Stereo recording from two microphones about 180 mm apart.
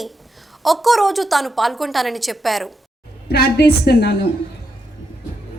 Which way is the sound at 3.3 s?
60° left (ahead or behind).